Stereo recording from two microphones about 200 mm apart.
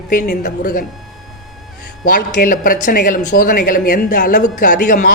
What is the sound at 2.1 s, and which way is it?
Speech, 45° left (ahead or behind).